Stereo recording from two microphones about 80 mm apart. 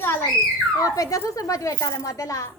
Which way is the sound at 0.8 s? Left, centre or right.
Left.